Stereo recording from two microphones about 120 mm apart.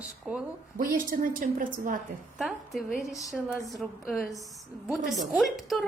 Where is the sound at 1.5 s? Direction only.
90° right.